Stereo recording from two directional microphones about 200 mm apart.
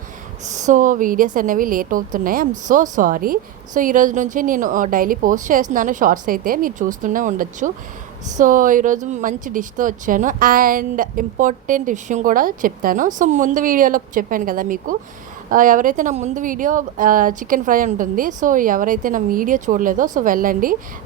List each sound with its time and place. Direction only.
0.4 s a woman's voice: 35° right (ahead or behind)